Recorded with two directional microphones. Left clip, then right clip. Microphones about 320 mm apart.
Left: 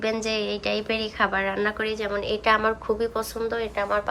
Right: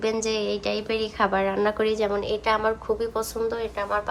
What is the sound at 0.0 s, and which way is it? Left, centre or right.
A woman's voice, centre.